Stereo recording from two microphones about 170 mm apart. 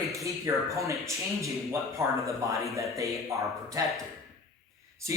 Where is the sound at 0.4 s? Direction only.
20° right (ahead or behind).